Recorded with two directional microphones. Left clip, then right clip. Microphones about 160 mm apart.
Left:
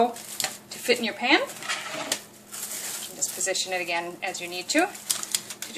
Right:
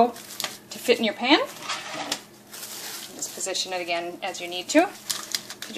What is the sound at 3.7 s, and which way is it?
Speech, 30° right (ahead or behind).